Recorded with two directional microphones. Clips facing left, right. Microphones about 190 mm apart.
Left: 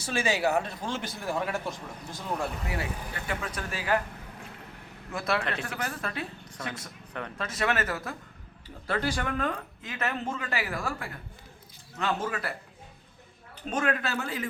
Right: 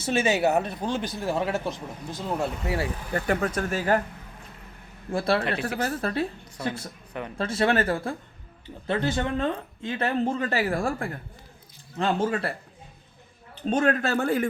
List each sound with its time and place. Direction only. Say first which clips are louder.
0.0 s speech: right 5 dB; 20° right (ahead or behind)
3.1 s speech: right 9 dB; 45° right (ahead or behind)
5.1 s a woman's voice: right 5 dB; 30° right (ahead or behind)
7.1 s speech: right 3 dB; 10° right (ahead or behind)
7.3 s a woman's voice: right 6 dB; 30° right (ahead or behind); by 10.9 s 45° right (ahead or behind)
11.9 s a woman's voice: right 6 dB; 30° right (ahead or behind)
13.7 s a woman's voice: right 6 dB; 35° right (ahead or behind)
14.0 s speech: right 8 dB; 50° right (ahead or behind)